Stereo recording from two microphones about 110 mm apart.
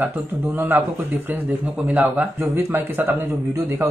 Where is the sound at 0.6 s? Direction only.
20° right (ahead or behind).